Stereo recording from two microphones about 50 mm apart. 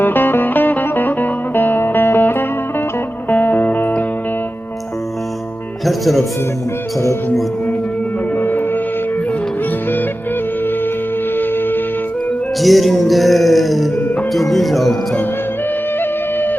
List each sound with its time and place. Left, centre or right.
0.0 s music: left
5.8 s speech: centre
8.4 s music: left
11.3 s music: left
12.6 s music: centre
16.0 s music: left